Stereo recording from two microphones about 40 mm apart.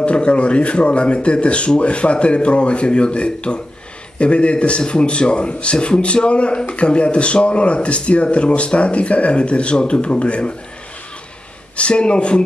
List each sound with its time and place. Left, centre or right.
0.0 s speech: left
11.7 s speech: left